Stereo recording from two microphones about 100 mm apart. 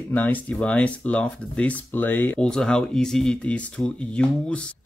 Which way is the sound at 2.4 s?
10° left (ahead or behind).